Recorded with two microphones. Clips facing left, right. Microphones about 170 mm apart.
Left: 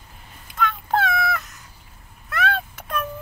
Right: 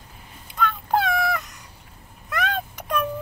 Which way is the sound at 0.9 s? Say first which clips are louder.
Even; 15° right (ahead or behind).